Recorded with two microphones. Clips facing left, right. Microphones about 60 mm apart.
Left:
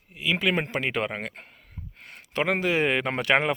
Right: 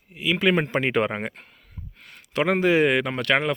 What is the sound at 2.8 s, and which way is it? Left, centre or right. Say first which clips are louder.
Speech: right 3 dB; centre.